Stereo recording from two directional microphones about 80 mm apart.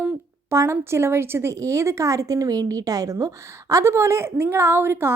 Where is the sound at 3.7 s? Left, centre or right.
Right.